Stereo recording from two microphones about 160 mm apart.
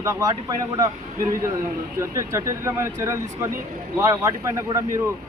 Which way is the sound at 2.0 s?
15° right (ahead or behind).